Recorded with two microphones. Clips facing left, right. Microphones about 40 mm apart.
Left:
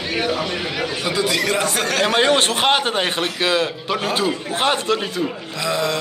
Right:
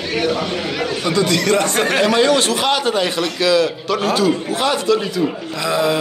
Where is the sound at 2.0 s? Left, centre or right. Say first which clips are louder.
Even; left.